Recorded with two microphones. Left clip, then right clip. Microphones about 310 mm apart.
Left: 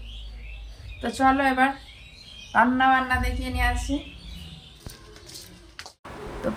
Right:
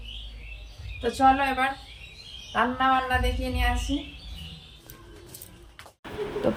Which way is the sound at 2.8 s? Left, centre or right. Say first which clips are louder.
Left 2 dB; centre.